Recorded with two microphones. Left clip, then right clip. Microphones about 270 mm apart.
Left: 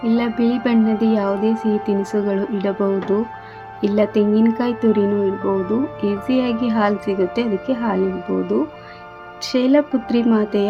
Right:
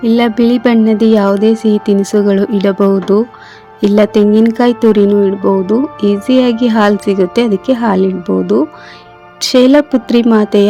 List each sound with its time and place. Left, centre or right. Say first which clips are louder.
0.0 s music: right 9 dB; right